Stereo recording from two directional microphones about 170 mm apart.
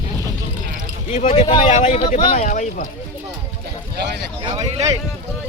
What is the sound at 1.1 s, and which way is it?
Speech, 45° left (ahead or behind).